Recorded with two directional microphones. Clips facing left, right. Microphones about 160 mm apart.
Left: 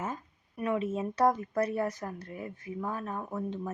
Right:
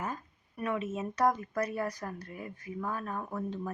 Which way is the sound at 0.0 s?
25° left (ahead or behind).